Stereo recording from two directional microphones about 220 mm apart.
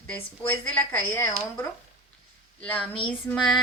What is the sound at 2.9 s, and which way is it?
Child singing, 25° left (ahead or behind).